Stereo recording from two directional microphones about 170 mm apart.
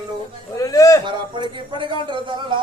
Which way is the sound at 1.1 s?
30° right (ahead or behind).